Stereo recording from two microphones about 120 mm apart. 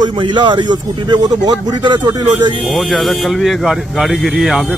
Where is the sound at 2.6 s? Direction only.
Centre (ahead or behind).